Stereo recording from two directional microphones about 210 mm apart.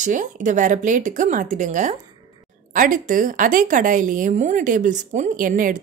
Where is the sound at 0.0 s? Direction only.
35° right (ahead or behind).